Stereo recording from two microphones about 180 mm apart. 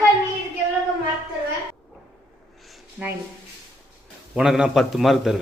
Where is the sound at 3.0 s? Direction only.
5° right (ahead or behind).